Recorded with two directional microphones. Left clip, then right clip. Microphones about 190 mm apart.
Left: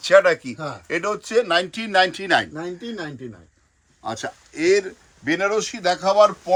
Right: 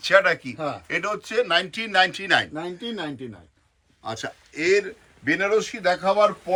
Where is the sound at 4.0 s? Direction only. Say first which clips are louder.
Left 3 dB; 50° left (ahead or behind).